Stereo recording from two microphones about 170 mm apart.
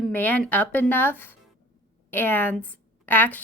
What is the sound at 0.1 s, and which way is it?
A woman's voice, 10° left (ahead or behind).